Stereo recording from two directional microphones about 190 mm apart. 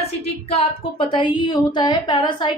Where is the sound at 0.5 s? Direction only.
30° left (ahead or behind).